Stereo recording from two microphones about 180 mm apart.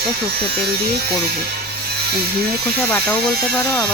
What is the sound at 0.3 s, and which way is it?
Speech, 60° right (ahead or behind).